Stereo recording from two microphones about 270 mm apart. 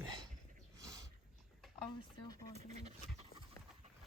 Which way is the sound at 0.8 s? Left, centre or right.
Centre.